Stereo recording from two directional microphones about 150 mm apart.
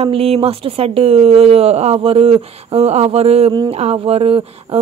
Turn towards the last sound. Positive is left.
turn(degrees=-40)  # may be behind; listen again after turning